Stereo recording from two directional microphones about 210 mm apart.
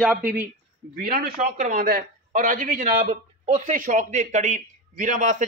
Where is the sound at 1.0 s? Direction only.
40° right (ahead or behind).